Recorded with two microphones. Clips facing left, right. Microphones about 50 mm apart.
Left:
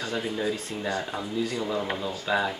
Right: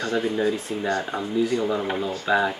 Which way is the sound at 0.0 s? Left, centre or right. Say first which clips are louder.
Right 6 dB; centre.